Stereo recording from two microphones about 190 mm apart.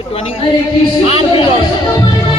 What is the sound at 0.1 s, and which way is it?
Speech, 30° left (ahead or behind).